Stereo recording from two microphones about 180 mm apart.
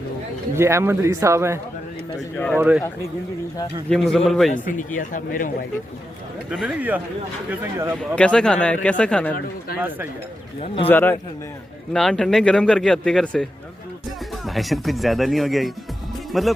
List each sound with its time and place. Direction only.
0.5 s speech: 15° right (ahead or behind)
2.1 s speech: 5° left (ahead or behind)
2.6 s speech: 10° right (ahead or behind)
3.8 s a man's voice: 5° left (ahead or behind)
4.5 s speech: 45° left (ahead or behind)
6.5 s speech: 10° right (ahead or behind)
7.9 s a man's voice: 5° left (ahead or behind)
10.8 s a man's voice: 10° left (ahead or behind)